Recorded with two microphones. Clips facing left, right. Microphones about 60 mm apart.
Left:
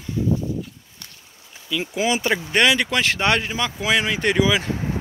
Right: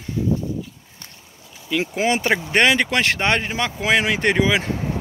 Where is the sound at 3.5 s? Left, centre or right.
Right.